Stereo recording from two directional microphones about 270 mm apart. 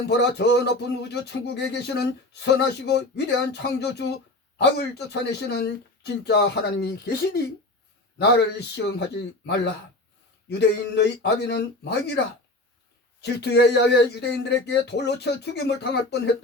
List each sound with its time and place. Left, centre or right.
0.1 s speech: left
13.2 s speech: left